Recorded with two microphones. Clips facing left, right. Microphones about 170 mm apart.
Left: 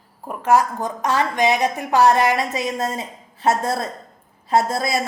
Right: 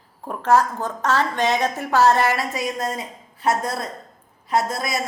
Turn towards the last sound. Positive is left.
turn(degrees=30)  # may be behind; listen again after turning